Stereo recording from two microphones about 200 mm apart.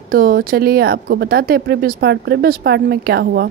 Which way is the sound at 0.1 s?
45° right (ahead or behind).